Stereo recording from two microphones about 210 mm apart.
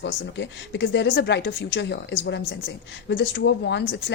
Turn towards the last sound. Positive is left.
turn(degrees=55)  # may be behind; listen again after turning